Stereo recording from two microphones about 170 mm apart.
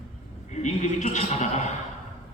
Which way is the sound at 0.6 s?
45° left (ahead or behind).